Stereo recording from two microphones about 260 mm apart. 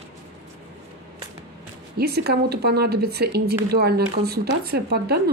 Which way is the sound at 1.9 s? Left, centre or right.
Right.